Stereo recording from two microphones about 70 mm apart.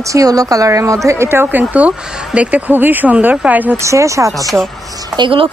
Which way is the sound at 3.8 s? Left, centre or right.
Right.